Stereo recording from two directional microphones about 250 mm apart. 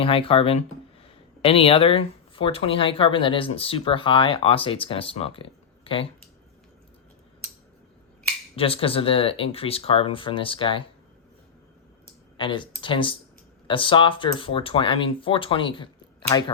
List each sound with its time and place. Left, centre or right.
0.0 s speech: left
8.5 s speech: left
12.4 s speech: centre